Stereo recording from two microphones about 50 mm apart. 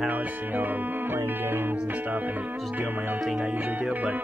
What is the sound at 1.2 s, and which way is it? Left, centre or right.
Music, right.